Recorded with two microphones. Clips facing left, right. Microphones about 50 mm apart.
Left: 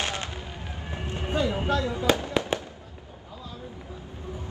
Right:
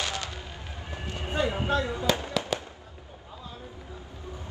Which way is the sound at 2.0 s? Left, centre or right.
Left.